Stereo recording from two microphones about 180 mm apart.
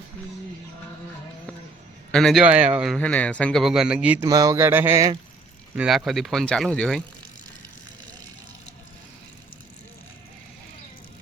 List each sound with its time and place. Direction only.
2.1 s a man's voice: centre (ahead or behind)
3.0 s a man's voice: 10° left (ahead or behind); by 4.3 s 10° right (ahead or behind)
4.3 s speech: 20° right (ahead or behind)
5.7 s a man's voice: 5° right (ahead or behind)